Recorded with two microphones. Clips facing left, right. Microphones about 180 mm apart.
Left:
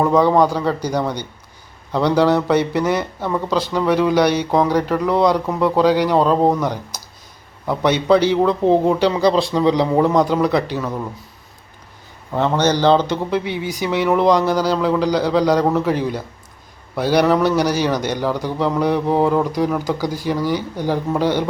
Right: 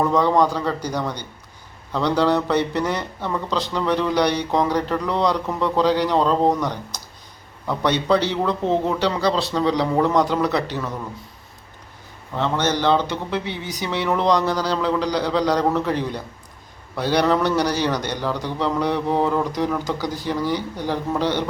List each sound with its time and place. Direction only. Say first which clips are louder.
0.0 s speech: left 4 dB; 10° left (ahead or behind)
12.4 s speech: left 5 dB; 40° left (ahead or behind)
13.3 s speech: left 5 dB; 10° left (ahead or behind)